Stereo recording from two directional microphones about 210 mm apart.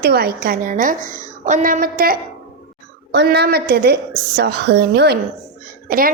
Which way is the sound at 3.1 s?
55° right (ahead or behind).